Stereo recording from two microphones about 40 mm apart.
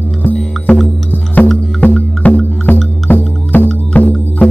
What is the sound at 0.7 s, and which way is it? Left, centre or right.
Music, left.